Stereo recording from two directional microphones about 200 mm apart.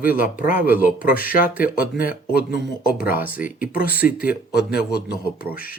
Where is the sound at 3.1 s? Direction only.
10° right (ahead or behind).